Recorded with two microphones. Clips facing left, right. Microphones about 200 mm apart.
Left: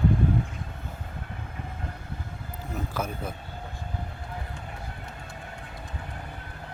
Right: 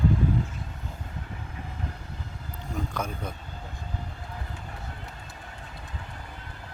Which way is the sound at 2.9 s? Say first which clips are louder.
Left 1 dB; 5° left (ahead or behind).